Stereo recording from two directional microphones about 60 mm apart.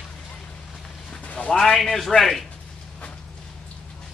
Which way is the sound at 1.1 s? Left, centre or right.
Left.